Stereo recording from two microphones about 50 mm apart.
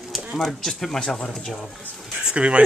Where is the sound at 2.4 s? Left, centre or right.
Right.